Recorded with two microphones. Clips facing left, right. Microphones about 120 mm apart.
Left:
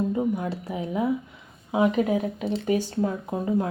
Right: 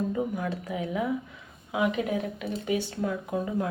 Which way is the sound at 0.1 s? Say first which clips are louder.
Left 4 dB; 25° left (ahead or behind).